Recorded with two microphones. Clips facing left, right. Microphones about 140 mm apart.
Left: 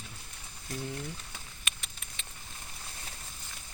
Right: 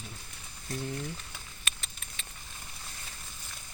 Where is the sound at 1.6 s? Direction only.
15° left (ahead or behind).